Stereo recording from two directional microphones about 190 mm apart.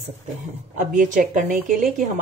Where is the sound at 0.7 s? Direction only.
40° right (ahead or behind).